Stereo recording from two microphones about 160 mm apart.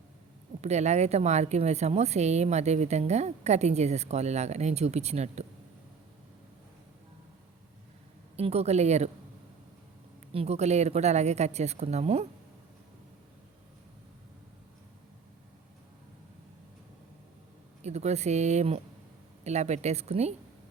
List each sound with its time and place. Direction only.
0.6 s a woman's voice: 45° right (ahead or behind)
8.4 s a woman's voice: 40° right (ahead or behind)
10.3 s a woman's voice: 40° right (ahead or behind)
17.8 s a woman's voice: 45° right (ahead or behind)